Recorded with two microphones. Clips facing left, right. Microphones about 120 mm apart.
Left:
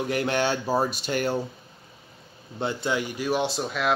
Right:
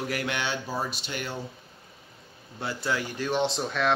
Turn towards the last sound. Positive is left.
turn(degrees=5)  # may be behind; listen again after turning